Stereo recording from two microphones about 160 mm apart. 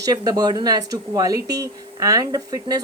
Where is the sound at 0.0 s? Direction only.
25° right (ahead or behind).